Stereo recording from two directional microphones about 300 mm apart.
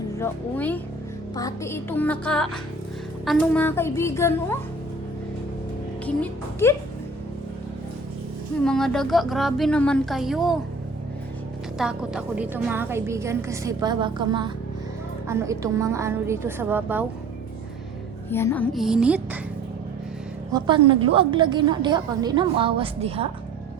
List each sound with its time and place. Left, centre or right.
0.2 s a woman's voice: centre
6.1 s speech: centre
8.6 s speech: centre
11.8 s a woman's voice: centre
18.3 s speech: centre
20.5 s a woman's voice: centre